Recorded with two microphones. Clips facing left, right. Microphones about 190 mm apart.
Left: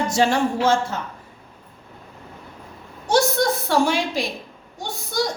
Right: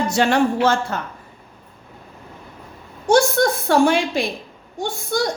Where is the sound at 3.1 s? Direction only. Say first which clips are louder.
Right 3 dB; 50° right (ahead or behind).